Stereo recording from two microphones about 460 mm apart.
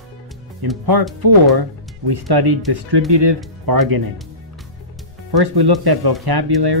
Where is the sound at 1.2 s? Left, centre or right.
Right.